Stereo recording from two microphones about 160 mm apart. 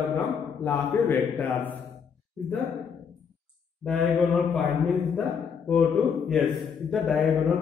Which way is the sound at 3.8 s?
5° left (ahead or behind).